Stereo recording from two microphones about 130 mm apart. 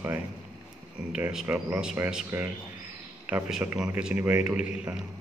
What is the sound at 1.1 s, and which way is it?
Speech, 5° right (ahead or behind).